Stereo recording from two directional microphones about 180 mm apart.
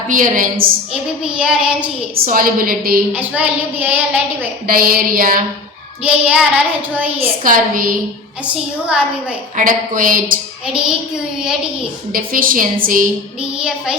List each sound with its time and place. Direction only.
0.1 s a woman's voice: 50° right (ahead or behind)
1.2 s child singing: 5° right (ahead or behind)
2.1 s a woman's voice: 55° right (ahead or behind)
3.1 s a woman's voice: 10° right (ahead or behind)
4.6 s a woman's voice: 55° right (ahead or behind)
6.0 s a woman's voice: 10° right (ahead or behind)
7.4 s a woman's voice: 50° right (ahead or behind)
9.6 s a woman's voice: 50° right (ahead or behind)
12.1 s a woman's voice: 50° right (ahead or behind)
13.6 s child singing: 5° right (ahead or behind)